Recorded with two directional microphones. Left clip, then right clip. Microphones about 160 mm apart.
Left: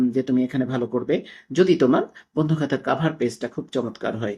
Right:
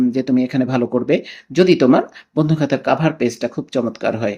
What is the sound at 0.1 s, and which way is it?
Speech, 25° right (ahead or behind).